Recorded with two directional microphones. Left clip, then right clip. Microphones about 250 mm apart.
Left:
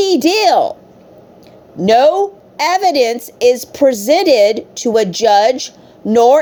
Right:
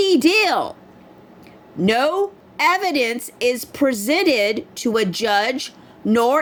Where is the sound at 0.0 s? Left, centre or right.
Centre.